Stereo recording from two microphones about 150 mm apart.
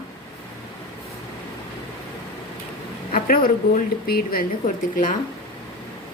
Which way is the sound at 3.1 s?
70° left (ahead or behind).